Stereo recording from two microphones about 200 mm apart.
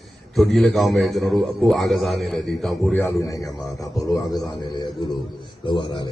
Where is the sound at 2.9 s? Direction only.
15° left (ahead or behind).